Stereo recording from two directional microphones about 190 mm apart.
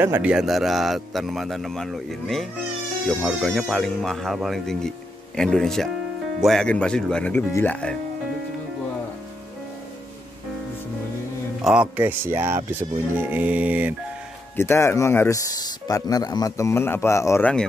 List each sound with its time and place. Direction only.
0.0 s speech: 10° right (ahead or behind); by 8.0 s 5° left (ahead or behind)
11.6 s speech: 5° right (ahead or behind)
14.6 s speech: 15° left (ahead or behind)